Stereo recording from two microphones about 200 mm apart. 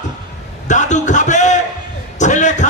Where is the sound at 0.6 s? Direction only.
35° left (ahead or behind).